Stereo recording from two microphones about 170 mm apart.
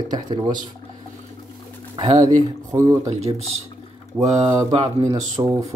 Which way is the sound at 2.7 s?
15° right (ahead or behind).